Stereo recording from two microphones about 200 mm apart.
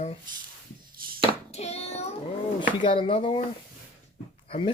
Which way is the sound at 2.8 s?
25° left (ahead or behind).